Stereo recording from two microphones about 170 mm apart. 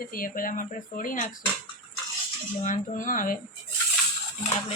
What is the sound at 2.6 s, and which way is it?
Speech, 50° left (ahead or behind).